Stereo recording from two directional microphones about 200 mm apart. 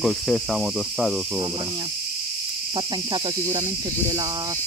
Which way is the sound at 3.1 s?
20° right (ahead or behind).